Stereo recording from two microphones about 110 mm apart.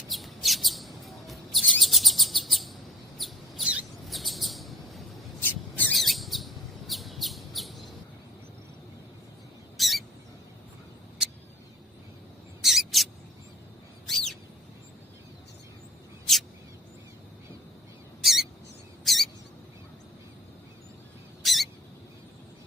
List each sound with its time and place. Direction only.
0.1 s chirp: centre (ahead or behind)
3.2 s mouse: centre (ahead or behind)
4.1 s chirp: centre (ahead or behind)
5.5 s mouse: 15° left (ahead or behind)
5.9 s bird: centre (ahead or behind)
9.7 s rodents: centre (ahead or behind)
12.6 s mouse: centre (ahead or behind)
14.1 s bird: 5° left (ahead or behind)
18.2 s mouse: centre (ahead or behind)
21.4 s a sound: centre (ahead or behind)